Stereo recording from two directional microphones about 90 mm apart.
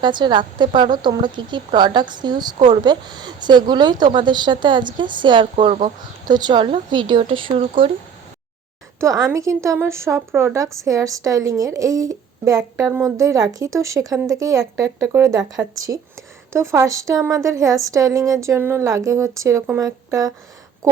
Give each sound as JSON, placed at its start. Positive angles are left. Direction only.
{"t": 0.0, "sound": "a woman's voice", "side_deg": -55}
{"t": 6.2, "sound": "speech", "side_deg": -50}
{"t": 9.0, "sound": "a woman's voice", "side_deg": -35}
{"t": 16.5, "sound": "a woman's voice", "side_deg": -35}